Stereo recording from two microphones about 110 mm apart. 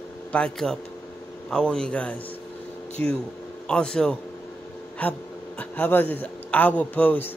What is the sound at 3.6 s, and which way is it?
Speech, 10° left (ahead or behind).